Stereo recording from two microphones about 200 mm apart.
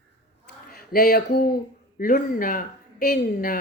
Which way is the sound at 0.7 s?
50° left (ahead or behind).